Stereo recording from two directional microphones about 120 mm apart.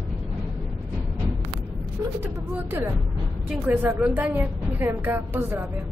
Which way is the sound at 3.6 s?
20° right (ahead or behind).